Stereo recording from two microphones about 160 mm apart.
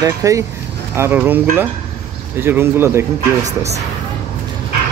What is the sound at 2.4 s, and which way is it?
A man's voice, 15° right (ahead or behind).